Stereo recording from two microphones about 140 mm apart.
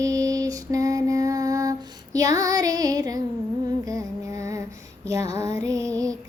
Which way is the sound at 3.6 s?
25° right (ahead or behind).